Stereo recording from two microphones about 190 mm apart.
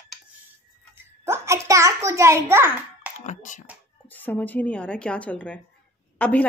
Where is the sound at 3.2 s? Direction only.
40° left (ahead or behind).